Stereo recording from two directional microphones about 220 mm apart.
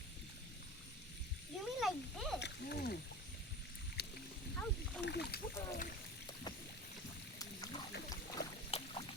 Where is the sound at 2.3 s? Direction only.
50° left (ahead or behind).